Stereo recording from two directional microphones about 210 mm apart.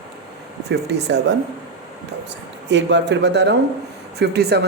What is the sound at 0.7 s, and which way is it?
Speech, 55° right (ahead or behind).